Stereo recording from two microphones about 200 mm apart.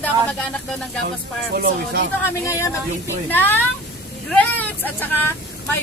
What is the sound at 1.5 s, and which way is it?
Speech, 50° right (ahead or behind).